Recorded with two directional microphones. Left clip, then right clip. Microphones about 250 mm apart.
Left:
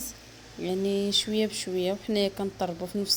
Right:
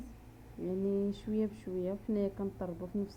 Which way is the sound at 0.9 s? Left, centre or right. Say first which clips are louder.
Left 11 dB; centre.